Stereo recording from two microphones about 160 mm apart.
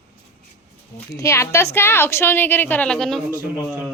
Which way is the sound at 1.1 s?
20° left (ahead or behind).